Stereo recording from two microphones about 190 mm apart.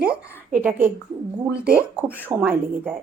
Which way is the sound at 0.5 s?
10° right (ahead or behind).